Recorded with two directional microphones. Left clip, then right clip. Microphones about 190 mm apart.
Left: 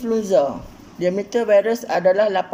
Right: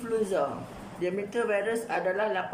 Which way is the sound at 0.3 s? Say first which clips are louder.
Left 11 dB; 45° left (ahead or behind).